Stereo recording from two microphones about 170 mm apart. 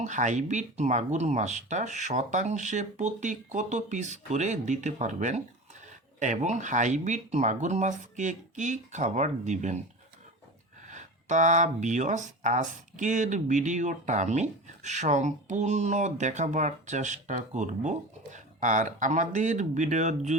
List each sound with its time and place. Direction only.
0.0 s speech: 45° right (ahead or behind)
10.8 s speech: 45° right (ahead or behind)